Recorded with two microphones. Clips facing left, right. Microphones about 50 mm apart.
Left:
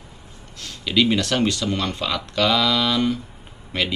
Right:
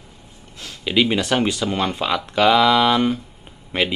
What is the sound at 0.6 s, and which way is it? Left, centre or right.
A man's voice, centre.